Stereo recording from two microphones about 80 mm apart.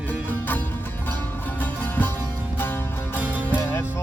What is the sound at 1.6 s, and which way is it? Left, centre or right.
Music, left.